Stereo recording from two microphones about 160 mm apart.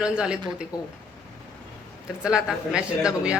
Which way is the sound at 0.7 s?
25° left (ahead or behind).